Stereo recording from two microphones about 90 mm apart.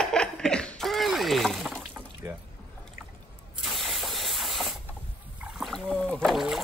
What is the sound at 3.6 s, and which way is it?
Spray, centre (ahead or behind).